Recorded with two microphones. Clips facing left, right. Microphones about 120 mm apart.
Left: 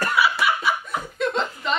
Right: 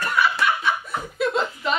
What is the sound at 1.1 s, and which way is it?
Chuckle, 5° right (ahead or behind).